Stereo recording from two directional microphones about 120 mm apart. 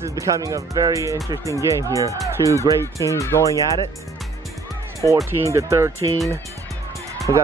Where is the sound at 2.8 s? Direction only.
25° left (ahead or behind).